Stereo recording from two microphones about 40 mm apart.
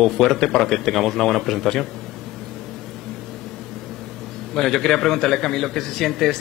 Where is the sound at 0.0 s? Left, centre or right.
Centre.